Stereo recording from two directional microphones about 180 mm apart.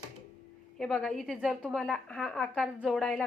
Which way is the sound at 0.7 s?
Centre (ahead or behind).